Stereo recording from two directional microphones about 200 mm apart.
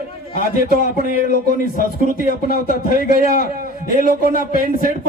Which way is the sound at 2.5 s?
45° left (ahead or behind).